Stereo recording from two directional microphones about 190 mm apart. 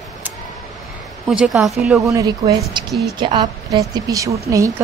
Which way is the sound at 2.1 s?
20° right (ahead or behind).